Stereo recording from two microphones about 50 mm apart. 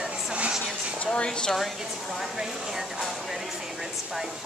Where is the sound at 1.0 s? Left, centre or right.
Left.